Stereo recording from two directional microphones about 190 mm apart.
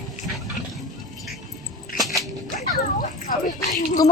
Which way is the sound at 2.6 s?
45° left (ahead or behind).